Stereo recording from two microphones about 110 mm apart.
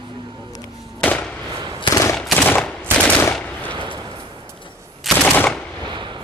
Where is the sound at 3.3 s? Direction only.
15° left (ahead or behind).